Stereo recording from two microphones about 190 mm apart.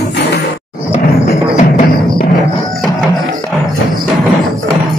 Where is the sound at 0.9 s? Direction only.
35° left (ahead or behind).